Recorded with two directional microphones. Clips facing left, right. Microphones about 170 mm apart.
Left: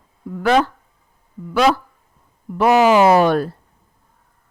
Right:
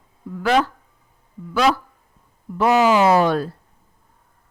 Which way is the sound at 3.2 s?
60° left (ahead or behind).